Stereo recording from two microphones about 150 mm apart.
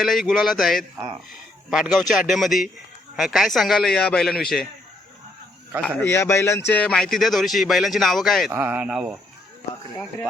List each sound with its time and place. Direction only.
0.0 s speech: centre (ahead or behind)
5.8 s speech: 15° left (ahead or behind); by 8.5 s centre (ahead or behind)
8.5 s speech: 10° right (ahead or behind)